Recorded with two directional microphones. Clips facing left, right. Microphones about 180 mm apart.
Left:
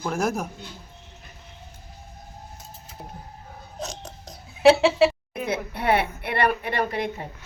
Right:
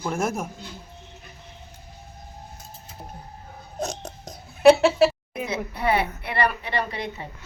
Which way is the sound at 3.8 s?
45° right (ahead or behind).